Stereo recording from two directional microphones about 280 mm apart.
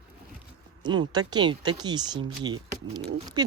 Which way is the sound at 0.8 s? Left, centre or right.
Centre.